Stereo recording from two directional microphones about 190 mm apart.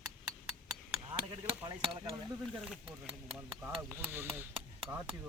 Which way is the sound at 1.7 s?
25° right (ahead or behind).